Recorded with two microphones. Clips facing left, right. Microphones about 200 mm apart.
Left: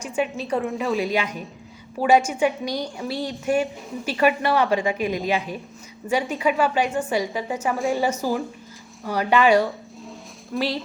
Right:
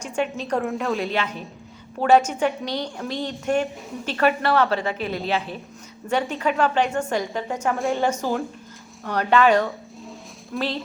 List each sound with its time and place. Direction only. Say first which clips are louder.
0.4 s a woman's voice: even; centre (ahead or behind)
1.1 s a woman's voice: left 1 dB; 10° left (ahead or behind)